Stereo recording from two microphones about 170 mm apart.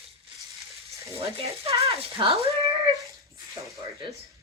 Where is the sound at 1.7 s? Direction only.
20° right (ahead or behind).